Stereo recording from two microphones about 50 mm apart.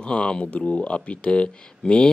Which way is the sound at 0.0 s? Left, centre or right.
Centre.